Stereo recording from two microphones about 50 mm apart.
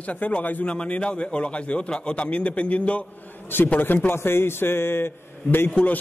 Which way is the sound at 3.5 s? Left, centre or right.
Left.